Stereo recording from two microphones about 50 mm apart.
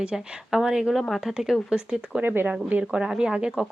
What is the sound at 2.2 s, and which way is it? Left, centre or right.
Speech, right.